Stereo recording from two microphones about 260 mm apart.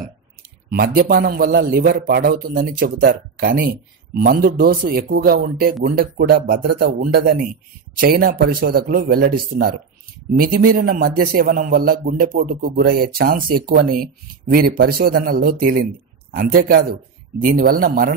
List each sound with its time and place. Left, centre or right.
0.7 s a man's voice: right